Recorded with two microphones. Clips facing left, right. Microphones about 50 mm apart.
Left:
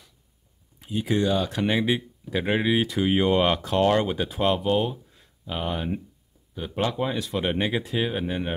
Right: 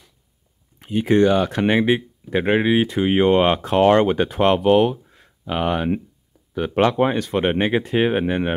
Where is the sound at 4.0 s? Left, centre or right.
Right.